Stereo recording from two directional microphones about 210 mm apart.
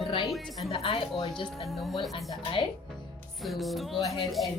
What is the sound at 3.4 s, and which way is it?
Music, centre (ahead or behind).